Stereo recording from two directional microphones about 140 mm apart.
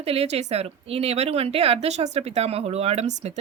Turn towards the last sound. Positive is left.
turn(degrees=-55)  # may be behind; listen again after turning